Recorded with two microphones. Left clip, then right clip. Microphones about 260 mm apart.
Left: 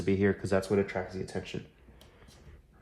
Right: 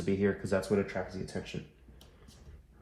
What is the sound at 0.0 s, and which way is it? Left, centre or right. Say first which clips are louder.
Speech: left 3 dB; left.